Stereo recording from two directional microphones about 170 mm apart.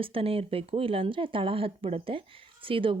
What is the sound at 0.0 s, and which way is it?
Speech, 35° right (ahead or behind).